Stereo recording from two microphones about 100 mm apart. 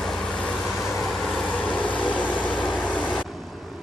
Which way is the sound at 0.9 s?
30° left (ahead or behind).